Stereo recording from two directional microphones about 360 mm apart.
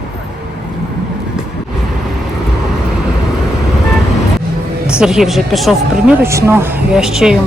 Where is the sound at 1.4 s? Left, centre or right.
Centre.